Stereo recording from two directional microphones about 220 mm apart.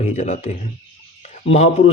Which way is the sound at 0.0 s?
30° left (ahead or behind).